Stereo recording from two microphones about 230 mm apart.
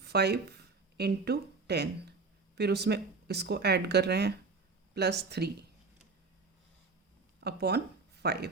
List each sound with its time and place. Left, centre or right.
0.0 s speech: right
7.4 s speech: right